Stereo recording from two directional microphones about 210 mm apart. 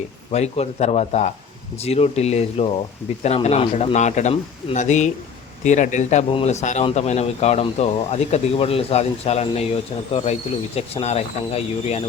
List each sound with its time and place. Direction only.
0.3 s speech: 30° left (ahead or behind)